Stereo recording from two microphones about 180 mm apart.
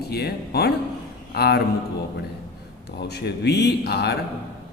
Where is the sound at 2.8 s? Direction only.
65° left (ahead or behind).